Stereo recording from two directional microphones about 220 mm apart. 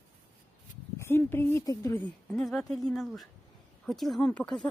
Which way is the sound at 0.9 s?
10° left (ahead or behind).